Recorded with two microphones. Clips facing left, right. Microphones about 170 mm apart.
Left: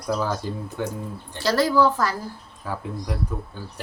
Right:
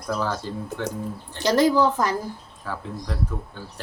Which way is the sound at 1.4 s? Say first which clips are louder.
Right 1 dB; 20° right (ahead or behind).